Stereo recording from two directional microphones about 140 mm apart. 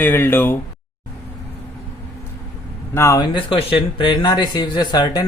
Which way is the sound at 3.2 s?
40° left (ahead or behind).